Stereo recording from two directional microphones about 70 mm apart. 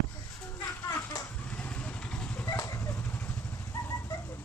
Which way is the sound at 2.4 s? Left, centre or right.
Left.